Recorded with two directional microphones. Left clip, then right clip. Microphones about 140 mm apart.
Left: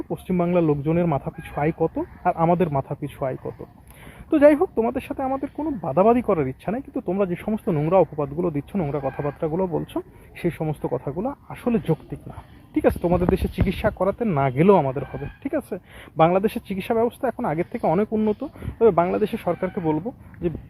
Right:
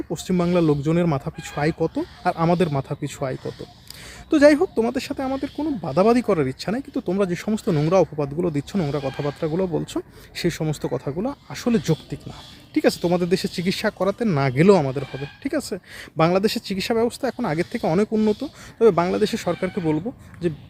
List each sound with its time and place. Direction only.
0.1 s speech: 40° right (ahead or behind)